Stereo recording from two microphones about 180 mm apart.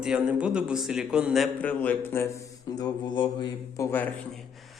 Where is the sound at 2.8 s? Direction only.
25° left (ahead or behind).